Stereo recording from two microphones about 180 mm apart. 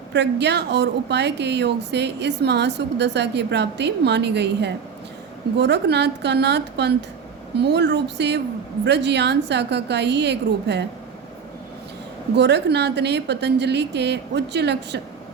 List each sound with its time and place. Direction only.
0.1 s a woman's voice: 70° right (ahead or behind)
12.4 s a woman's voice: 70° right (ahead or behind)